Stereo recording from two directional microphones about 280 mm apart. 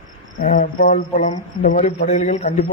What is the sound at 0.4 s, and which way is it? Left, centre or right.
Speech, left.